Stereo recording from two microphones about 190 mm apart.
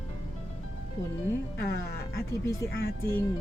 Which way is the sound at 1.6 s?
55° left (ahead or behind).